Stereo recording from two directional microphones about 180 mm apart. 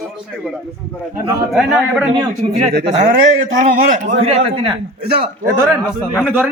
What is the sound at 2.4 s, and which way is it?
A man's voice, 35° right (ahead or behind).